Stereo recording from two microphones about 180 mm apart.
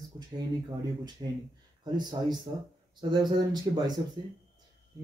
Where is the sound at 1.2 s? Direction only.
25° right (ahead or behind).